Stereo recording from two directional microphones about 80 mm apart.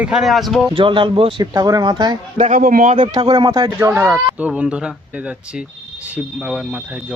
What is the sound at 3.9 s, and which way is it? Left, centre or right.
Speech, right.